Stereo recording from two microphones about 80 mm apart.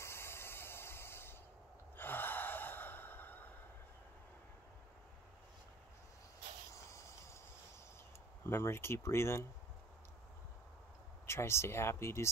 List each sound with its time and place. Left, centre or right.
0.0 s hiss: left
2.0 s gasp: left
6.7 s a sound: left
8.5 s speech: left
11.2 s speech: left